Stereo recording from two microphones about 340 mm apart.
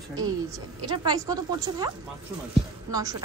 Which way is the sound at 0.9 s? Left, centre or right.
Centre.